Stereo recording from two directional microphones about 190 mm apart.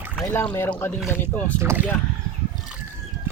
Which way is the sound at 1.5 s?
10° right (ahead or behind).